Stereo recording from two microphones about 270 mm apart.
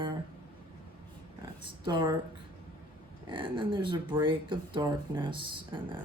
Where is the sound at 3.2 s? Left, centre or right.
Centre.